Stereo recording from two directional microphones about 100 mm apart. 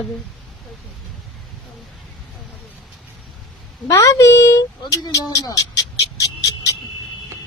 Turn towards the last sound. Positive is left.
turn(degrees=35)  # may be behind; listen again after turning